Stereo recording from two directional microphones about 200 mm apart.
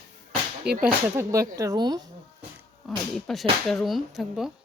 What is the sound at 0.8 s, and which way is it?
Speech, 15° right (ahead or behind).